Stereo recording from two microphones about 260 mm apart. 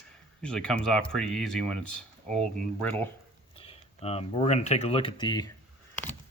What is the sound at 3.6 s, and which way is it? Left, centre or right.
Speech, left.